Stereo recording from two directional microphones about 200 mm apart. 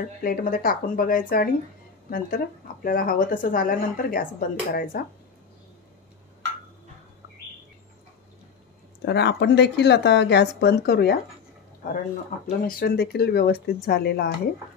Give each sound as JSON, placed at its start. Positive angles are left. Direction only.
{"t": 0.2, "sound": "speech", "side_deg": 45}
{"t": 9.0, "sound": "speech", "side_deg": 55}
{"t": 12.4, "sound": "speech", "side_deg": 50}